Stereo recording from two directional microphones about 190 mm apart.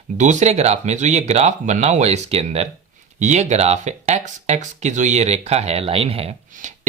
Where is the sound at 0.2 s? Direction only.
40° right (ahead or behind).